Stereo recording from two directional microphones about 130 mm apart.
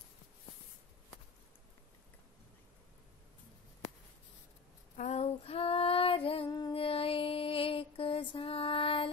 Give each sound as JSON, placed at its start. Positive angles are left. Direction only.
{"t": 4.9, "sound": "female singing", "side_deg": 60}
{"t": 6.7, "sound": "music", "side_deg": 45}